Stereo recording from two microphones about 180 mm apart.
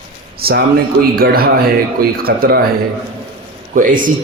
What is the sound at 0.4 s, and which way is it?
Speech, 60° right (ahead or behind).